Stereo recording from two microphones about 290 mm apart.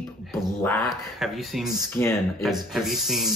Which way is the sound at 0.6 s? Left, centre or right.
Centre.